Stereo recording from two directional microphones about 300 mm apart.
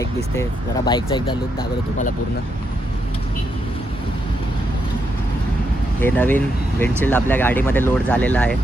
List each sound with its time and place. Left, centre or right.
0.9 s speech: centre
1.5 s speech: left
6.1 s speech: centre